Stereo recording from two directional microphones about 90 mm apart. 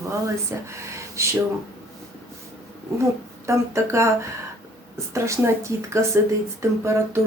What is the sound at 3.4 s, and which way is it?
Speech, 30° right (ahead or behind).